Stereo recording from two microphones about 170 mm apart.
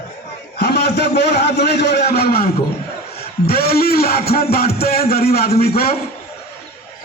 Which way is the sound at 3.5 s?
65° left (ahead or behind).